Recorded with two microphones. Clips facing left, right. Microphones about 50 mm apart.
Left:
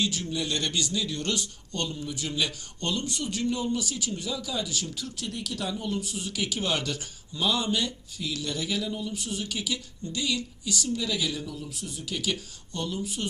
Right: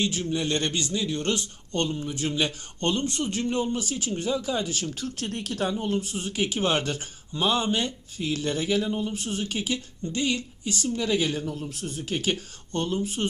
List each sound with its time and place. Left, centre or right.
0.0 s speech: right